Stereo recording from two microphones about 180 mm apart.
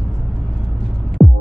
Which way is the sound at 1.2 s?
Centre (ahead or behind).